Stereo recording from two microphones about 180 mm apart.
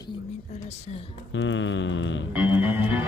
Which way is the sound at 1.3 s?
90° left.